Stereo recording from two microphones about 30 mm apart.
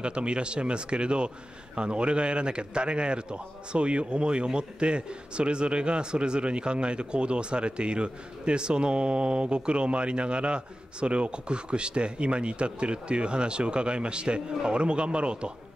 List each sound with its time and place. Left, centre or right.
0.0 s a man's voice: right